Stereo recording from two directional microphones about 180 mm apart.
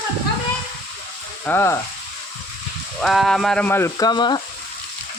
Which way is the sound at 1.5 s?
15° left (ahead or behind).